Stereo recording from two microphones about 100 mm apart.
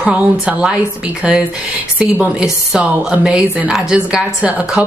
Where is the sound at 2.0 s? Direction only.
10° right (ahead or behind).